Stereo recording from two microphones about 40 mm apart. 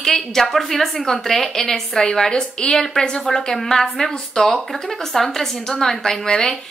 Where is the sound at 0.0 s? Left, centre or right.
Centre.